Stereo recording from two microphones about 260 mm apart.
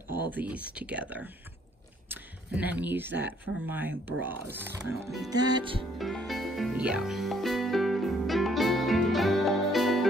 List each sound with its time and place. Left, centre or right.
0.3 s speech: centre
5.9 s music: centre